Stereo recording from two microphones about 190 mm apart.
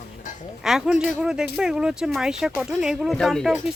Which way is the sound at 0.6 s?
Centre (ahead or behind).